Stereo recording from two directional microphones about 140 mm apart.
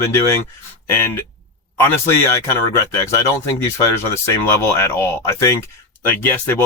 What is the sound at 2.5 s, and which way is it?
Speech, 20° left (ahead or behind).